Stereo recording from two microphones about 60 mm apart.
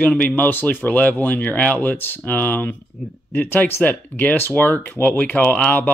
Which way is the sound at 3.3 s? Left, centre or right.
Left.